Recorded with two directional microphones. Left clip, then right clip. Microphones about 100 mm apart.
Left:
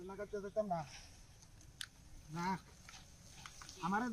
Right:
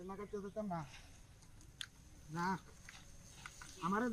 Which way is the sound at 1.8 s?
15° left (ahead or behind).